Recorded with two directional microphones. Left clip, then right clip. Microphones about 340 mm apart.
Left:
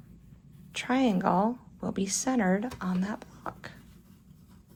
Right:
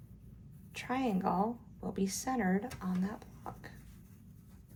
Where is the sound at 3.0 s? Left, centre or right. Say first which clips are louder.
Left 6 dB; centre.